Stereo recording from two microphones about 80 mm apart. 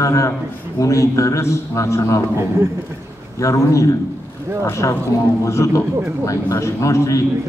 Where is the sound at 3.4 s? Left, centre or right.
Left.